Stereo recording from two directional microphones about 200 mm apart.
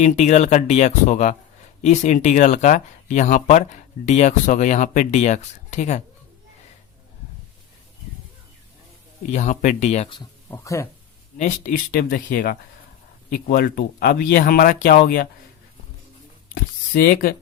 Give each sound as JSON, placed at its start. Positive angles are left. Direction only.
{"t": 0.0, "sound": "speech", "side_deg": 35}
{"t": 9.3, "sound": "speech", "side_deg": 40}
{"t": 10.5, "sound": "speech", "side_deg": 15}
{"t": 11.3, "sound": "speech", "side_deg": 40}
{"t": 16.6, "sound": "speech", "side_deg": 45}